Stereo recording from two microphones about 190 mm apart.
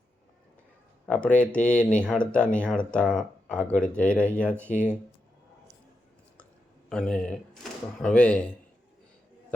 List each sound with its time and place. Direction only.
1.0 s speech: 5° left (ahead or behind)
6.9 s speech: 5° left (ahead or behind)